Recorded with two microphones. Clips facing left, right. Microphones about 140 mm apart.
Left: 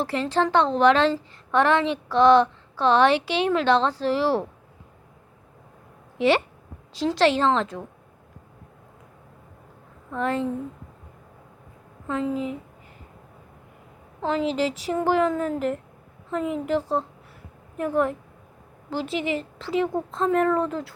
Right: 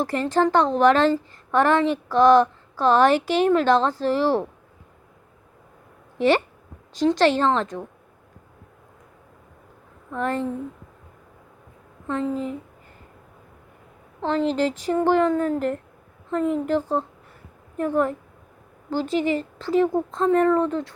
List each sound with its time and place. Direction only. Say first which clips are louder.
0.5 s a woman's voice: even; centre (ahead or behind)
3.1 s speech: right 3 dB; 45° right (ahead or behind)
3.4 s a woman's voice: right 2 dB; centre (ahead or behind)
6.9 s a woman's voice: right 2 dB; 5° left (ahead or behind)
10.1 s a woman's voice: even; centre (ahead or behind)
12.0 s a woman's voice: right 1 dB; 5° left (ahead or behind)
14.2 s a woman's voice: right 2 dB; 5° left (ahead or behind)